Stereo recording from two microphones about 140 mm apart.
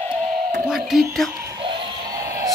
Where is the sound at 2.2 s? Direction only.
20° right (ahead or behind).